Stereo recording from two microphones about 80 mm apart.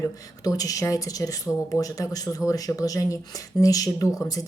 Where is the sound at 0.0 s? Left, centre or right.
Left.